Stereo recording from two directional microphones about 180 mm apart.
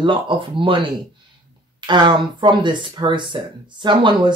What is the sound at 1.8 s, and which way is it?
Speech, 25° right (ahead or behind).